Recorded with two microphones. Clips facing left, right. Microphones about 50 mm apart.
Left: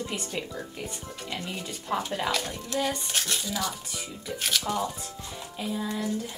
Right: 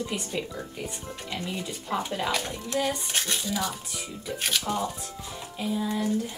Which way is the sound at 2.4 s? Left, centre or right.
Right.